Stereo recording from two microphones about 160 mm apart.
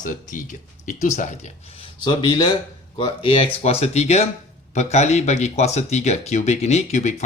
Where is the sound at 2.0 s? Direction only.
30° left (ahead or behind).